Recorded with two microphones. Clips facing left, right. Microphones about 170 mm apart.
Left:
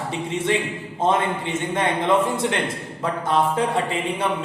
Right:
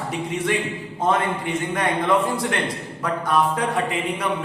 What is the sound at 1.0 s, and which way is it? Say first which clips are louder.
A man's voice: left 1 dB; 25° left (ahead or behind).